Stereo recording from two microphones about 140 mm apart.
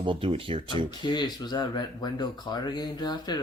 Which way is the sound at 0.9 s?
30° left (ahead or behind).